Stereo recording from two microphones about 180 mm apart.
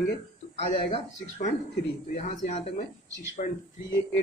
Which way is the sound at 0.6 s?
35° left (ahead or behind).